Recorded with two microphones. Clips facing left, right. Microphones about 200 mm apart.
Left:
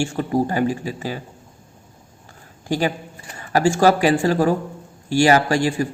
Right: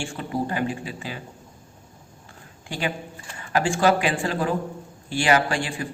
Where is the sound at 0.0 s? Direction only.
40° left (ahead or behind).